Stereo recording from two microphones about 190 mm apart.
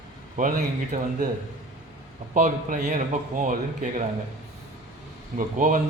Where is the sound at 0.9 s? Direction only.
50° right (ahead or behind).